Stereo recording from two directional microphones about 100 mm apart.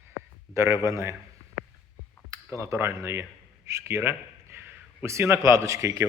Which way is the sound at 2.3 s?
30° right (ahead or behind).